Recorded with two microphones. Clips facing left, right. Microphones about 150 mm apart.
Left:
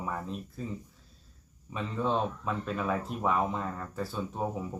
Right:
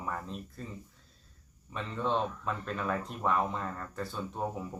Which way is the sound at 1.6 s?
5° left (ahead or behind).